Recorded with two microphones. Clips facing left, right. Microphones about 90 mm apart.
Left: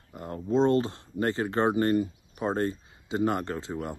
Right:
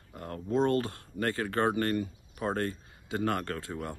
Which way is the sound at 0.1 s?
20° left (ahead or behind).